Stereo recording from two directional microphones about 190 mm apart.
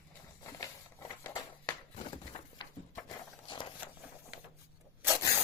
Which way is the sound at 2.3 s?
40° left (ahead or behind).